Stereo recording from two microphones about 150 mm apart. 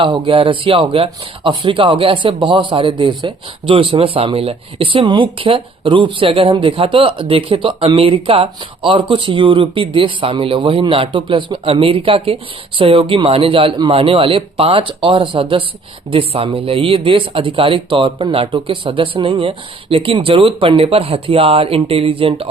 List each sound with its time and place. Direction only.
0.0 s speech: 35° right (ahead or behind)